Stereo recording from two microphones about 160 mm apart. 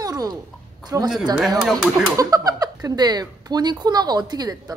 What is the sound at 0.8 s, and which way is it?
Speech, 25° right (ahead or behind).